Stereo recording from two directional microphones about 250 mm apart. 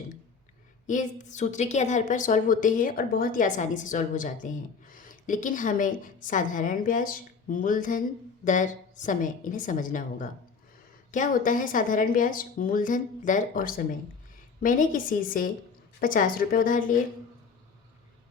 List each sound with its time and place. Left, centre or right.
0.9 s a woman's voice: left